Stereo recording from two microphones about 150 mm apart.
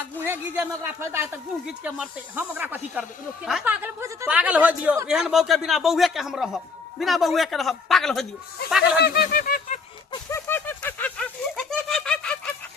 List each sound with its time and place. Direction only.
0.3 s a man's voice: 15° right (ahead or behind); by 8.3 s centre (ahead or behind)
9.0 s fowl: 90° left; by 9.8 s 60° left (ahead or behind)
10.2 s a sound: 15° left (ahead or behind)